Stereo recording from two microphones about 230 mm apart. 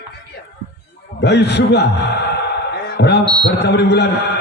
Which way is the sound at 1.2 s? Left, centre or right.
Left.